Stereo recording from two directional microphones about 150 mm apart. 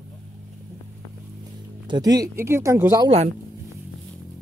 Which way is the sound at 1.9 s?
25° right (ahead or behind).